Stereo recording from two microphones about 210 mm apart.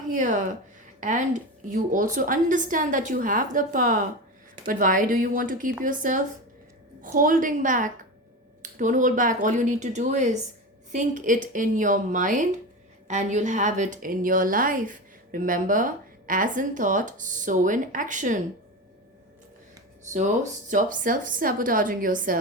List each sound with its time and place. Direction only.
0.1 s a woman's voice: 35° right (ahead or behind)
20.1 s a woman's voice: 35° right (ahead or behind)